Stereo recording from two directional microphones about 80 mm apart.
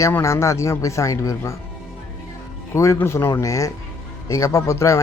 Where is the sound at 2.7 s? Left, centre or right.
Left.